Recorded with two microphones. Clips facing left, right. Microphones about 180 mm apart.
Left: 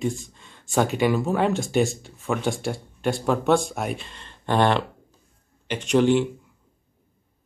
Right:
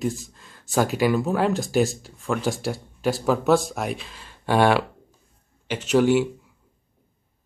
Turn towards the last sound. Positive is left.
turn(degrees=-5)  # may be behind; listen again after turning